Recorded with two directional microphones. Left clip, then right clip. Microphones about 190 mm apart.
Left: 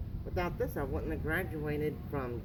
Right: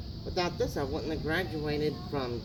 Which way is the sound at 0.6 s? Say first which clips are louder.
Right 4 dB; 10° right (ahead or behind).